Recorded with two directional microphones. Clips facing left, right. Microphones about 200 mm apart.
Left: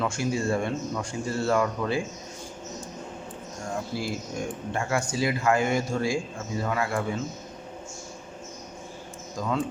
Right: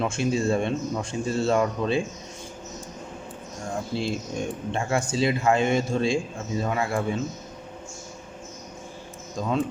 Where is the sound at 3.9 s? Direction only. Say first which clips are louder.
Right 3 dB; 25° right (ahead or behind).